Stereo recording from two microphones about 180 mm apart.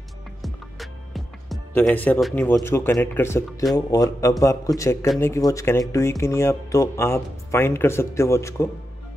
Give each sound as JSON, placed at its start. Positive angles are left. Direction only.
{"t": 0.4, "sound": "music", "side_deg": 0}
{"t": 1.7, "sound": "a man's voice", "side_deg": 10}